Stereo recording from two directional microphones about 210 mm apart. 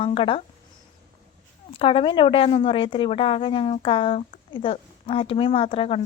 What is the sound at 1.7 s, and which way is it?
A woman's voice, 25° left (ahead or behind).